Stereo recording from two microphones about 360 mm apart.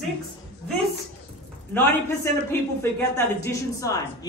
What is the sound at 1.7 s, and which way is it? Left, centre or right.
A man's voice, centre.